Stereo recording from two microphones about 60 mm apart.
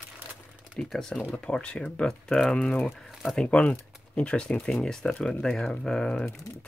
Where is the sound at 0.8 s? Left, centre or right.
Centre.